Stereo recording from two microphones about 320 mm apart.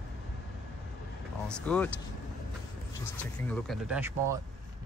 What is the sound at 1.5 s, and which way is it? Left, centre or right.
Speech, centre.